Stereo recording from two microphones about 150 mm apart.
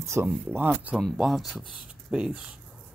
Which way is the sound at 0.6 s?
5° right (ahead or behind).